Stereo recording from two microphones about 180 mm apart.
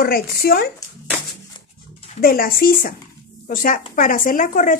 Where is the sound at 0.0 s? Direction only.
60° left (ahead or behind).